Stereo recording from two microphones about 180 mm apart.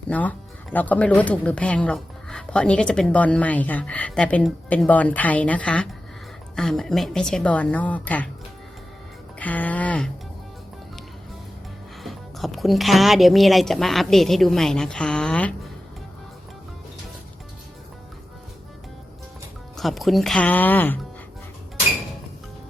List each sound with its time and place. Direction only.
0.1 s speech: 10° left (ahead or behind)
9.4 s speech: 10° left (ahead or behind)
12.0 s speech: centre (ahead or behind)
19.7 s speech: centre (ahead or behind)